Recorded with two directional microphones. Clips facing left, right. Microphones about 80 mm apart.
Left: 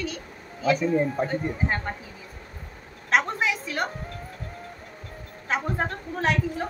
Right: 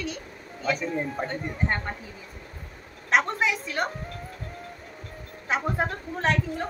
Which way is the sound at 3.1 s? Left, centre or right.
Centre.